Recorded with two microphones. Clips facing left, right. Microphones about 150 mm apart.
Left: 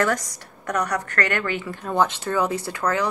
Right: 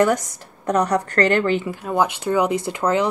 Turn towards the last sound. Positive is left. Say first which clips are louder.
# right 4 dB
turn(degrees=-20)  # may be behind; listen again after turning